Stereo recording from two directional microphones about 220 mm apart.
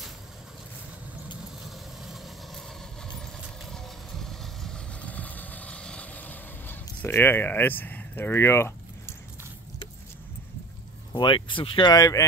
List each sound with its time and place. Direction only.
2.0 s vehicle: centre (ahead or behind)
11.1 s speech: 20° left (ahead or behind)